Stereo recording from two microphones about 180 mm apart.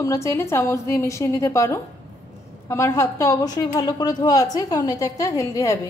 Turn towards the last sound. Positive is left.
turn(degrees=20)  # may be behind; listen again after turning